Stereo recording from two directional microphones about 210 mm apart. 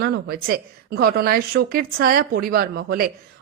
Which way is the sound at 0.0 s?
45° right (ahead or behind).